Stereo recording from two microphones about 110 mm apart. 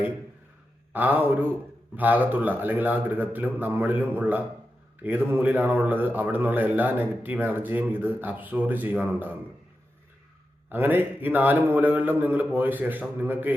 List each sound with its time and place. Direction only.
0.9 s a man's voice: 15° right (ahead or behind)
10.7 s a man's voice: 20° right (ahead or behind)